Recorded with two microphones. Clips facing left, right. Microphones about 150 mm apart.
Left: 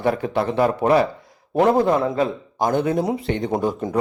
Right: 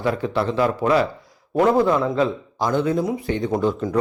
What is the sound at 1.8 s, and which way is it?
Speech, 45° left (ahead or behind).